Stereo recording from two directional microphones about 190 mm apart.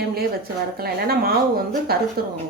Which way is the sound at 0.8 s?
55° right (ahead or behind).